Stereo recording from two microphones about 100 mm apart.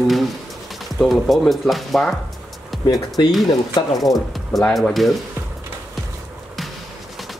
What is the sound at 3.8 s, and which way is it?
Speech, 50° left (ahead or behind).